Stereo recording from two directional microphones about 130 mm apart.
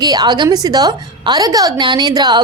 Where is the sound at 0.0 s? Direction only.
30° right (ahead or behind).